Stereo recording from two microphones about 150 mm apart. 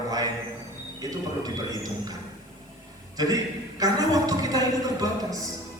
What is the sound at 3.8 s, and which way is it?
Speech, 25° right (ahead or behind).